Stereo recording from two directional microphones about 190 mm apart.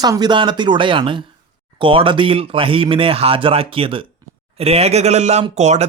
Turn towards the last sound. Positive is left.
turn(degrees=-35)  # may be behind; listen again after turning